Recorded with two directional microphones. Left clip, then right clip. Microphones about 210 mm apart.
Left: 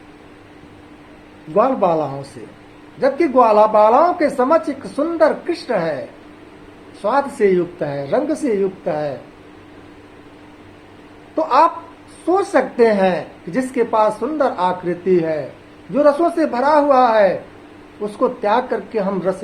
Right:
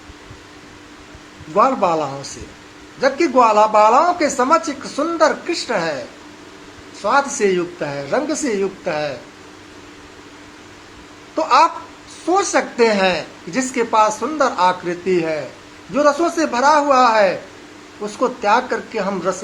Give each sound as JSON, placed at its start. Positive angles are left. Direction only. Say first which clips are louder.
{"t": 1.5, "sound": "a woman's voice", "louder": "even", "side_deg": -20}
{"t": 7.0, "sound": "a woman's voice", "louder": "even", "side_deg": -20}
{"t": 11.3, "sound": "a woman's voice", "louder": "even", "side_deg": -20}